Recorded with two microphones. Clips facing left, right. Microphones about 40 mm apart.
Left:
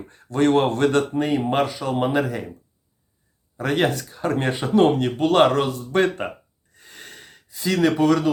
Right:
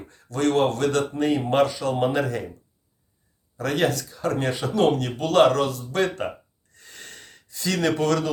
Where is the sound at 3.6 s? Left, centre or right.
Left.